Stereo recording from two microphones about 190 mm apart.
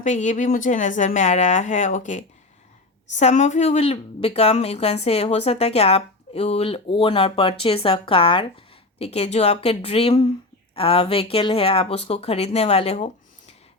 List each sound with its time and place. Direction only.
0.0 s a woman's voice: 40° left (ahead or behind)